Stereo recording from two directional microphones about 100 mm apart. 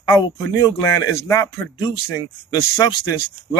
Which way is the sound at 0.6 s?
35° left (ahead or behind).